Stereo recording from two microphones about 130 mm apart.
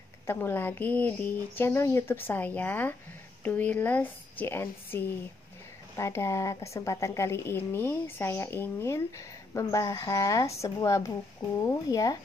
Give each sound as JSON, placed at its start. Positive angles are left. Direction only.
{"t": 0.3, "sound": "a woman's voice", "side_deg": 15}